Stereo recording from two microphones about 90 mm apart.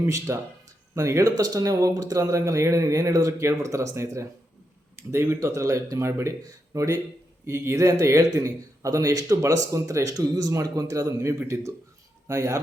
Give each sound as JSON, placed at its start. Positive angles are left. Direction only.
{"t": 0.0, "sound": "a man's voice", "side_deg": -35}